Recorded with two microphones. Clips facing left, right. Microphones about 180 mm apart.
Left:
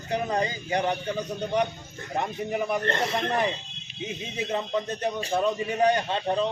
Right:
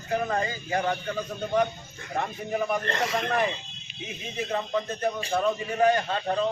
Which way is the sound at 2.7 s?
30° left (ahead or behind).